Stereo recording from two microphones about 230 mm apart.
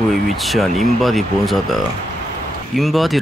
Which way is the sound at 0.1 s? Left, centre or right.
Centre.